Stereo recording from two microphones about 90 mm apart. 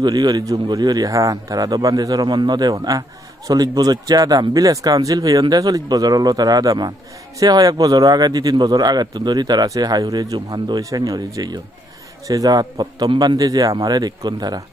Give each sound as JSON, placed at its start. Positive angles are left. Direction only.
{"t": 0.0, "sound": "a man's voice", "side_deg": -50}